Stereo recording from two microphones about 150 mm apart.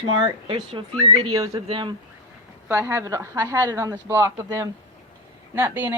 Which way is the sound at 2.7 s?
15° right (ahead or behind).